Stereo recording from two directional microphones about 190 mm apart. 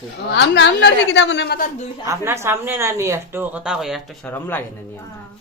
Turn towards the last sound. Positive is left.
turn(degrees=10)  # may be behind; listen again after turning